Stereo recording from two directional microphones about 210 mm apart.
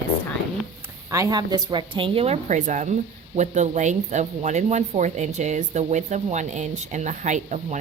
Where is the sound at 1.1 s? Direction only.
15° right (ahead or behind).